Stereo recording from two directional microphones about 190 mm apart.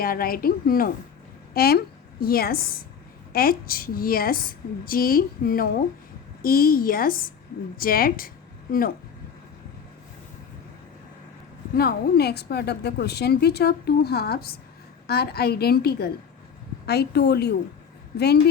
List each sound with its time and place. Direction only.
0.0 s a woman's voice: 50° left (ahead or behind)
11.7 s a woman's voice: 55° left (ahead or behind)